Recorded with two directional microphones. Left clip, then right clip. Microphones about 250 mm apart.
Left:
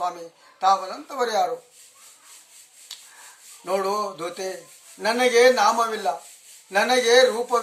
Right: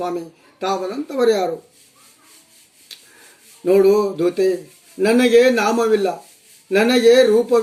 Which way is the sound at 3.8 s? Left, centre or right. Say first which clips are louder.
Right 10 dB; centre.